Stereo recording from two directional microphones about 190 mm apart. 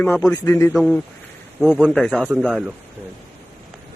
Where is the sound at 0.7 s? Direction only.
Centre (ahead or behind).